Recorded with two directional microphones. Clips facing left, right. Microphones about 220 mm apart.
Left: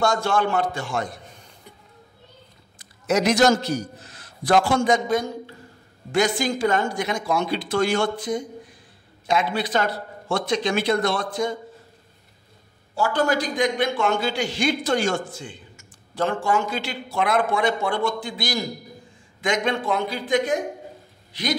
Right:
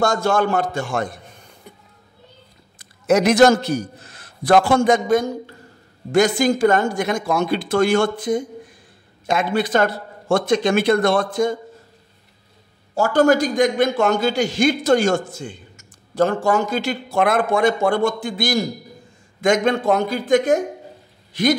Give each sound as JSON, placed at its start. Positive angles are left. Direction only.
{"t": 0.0, "sound": "a man's voice", "side_deg": -45}
{"t": 2.8, "sound": "a man's voice", "side_deg": -55}
{"t": 12.9, "sound": "a man's voice", "side_deg": -45}